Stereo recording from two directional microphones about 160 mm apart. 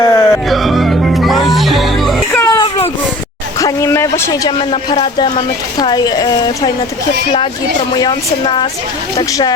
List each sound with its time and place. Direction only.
0.0 s music: 20° left (ahead or behind)
0.4 s music: centre (ahead or behind)
2.4 s a sound: 20° left (ahead or behind)
3.6 s a man's voice: 20° left (ahead or behind)
7.9 s a woman's voice: 25° left (ahead or behind)